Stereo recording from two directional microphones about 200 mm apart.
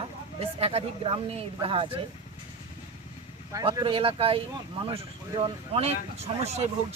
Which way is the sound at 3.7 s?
25° right (ahead or behind).